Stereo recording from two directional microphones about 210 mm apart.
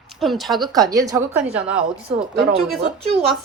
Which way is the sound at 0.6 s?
15° right (ahead or behind).